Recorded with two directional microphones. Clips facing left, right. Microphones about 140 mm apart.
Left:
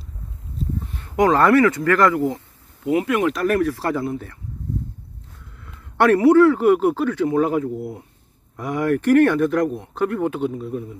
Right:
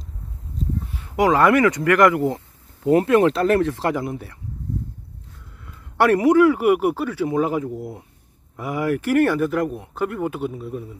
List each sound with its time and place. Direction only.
0.9 s speech: 10° right (ahead or behind)
2.9 s speech: 35° right (ahead or behind); by 4.4 s 15° right (ahead or behind)
5.9 s speech: 15° right (ahead or behind)